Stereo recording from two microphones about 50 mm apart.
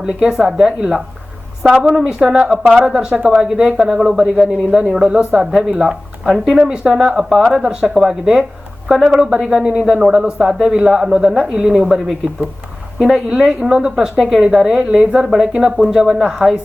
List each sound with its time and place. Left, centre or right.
0.0 s speech: centre
1.6 s speech: right
6.3 s speech: centre
6.7 s speech: centre
14.2 s speech: centre